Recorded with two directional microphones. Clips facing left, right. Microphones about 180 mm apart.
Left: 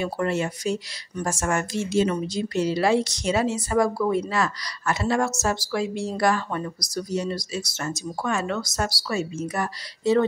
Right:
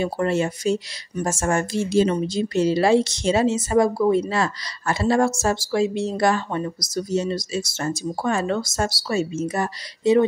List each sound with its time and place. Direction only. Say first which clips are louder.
0.0 s a woman's voice: right 3 dB; 30° right (ahead or behind)